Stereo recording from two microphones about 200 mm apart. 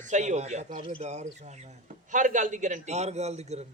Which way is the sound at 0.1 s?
35° right (ahead or behind).